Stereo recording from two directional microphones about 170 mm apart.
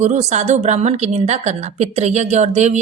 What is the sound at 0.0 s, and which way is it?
A woman's voice, 40° right (ahead or behind).